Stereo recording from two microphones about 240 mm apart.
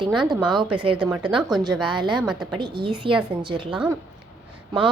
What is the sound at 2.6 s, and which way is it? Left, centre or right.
A woman's voice, centre.